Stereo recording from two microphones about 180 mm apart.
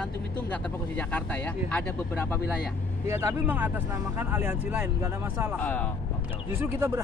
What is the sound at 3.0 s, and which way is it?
Speech, 15° right (ahead or behind).